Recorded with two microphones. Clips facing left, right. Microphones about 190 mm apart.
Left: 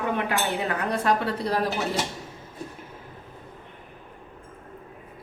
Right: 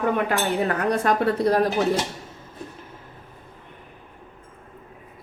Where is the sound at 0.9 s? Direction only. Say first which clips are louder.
Right 1 dB; 50° right (ahead or behind).